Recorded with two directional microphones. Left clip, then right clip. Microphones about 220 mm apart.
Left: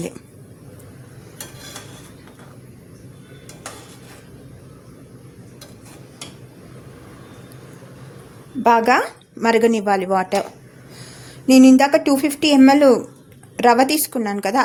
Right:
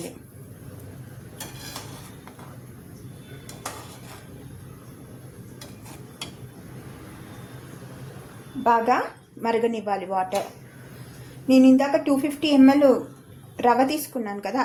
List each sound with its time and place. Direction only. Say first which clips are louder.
8.6 s a woman's voice: left 6 dB; 50° left (ahead or behind)
11.4 s a woman's voice: left 6 dB; 50° left (ahead or behind)